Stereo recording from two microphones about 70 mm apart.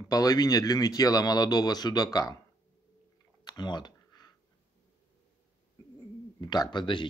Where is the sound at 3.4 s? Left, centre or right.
Left.